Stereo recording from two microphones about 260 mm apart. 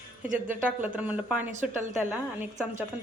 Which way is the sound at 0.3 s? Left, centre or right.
Centre.